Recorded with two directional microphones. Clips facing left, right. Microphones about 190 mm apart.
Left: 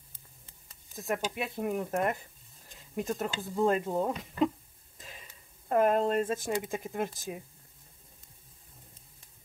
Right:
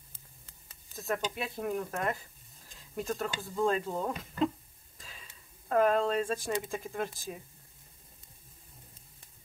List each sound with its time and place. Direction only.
0.9 s speech: 15° left (ahead or behind)
5.7 s speech: 15° left (ahead or behind)